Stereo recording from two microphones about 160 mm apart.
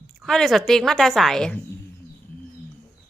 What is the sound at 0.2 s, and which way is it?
A woman's voice, centre (ahead or behind).